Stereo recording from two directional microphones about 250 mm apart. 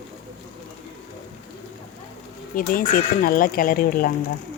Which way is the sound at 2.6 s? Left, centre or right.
Left.